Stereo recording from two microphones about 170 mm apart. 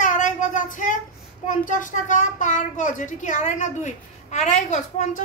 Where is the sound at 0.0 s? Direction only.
50° left (ahead or behind).